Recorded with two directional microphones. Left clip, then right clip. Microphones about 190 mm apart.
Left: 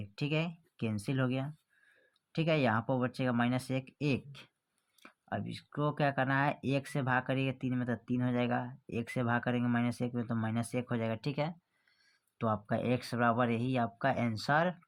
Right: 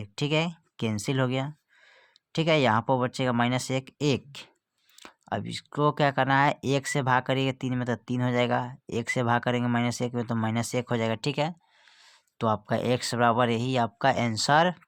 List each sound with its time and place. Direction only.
0.0 s speech: 45° right (ahead or behind)